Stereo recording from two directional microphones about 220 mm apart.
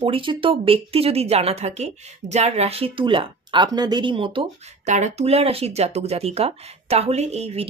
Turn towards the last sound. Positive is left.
turn(degrees=-30)  # may be behind; listen again after turning